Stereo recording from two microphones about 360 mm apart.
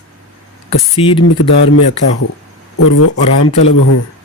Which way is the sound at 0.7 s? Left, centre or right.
Centre.